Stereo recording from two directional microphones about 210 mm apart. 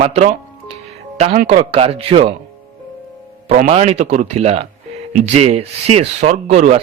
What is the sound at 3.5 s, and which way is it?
Speech, 40° right (ahead or behind).